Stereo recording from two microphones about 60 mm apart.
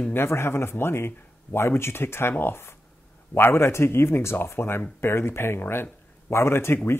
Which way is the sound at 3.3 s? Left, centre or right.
Left.